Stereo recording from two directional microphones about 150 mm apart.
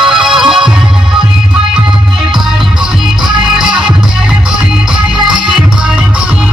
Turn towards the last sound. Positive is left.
turn(degrees=0)  # may be behind; listen again after turning